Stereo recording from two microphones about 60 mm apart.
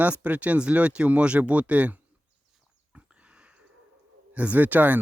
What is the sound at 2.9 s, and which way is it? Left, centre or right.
Pig, centre.